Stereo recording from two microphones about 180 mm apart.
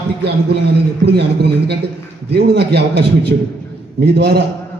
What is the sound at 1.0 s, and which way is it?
A man's voice, 65° right (ahead or behind).